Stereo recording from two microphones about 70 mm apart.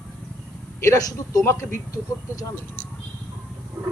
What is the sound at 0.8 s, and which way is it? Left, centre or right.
Speech, left.